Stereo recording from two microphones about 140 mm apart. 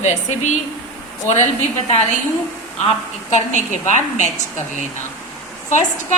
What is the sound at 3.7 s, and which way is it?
Speech, 55° left (ahead or behind).